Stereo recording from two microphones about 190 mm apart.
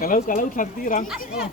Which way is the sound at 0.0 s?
45° left (ahead or behind).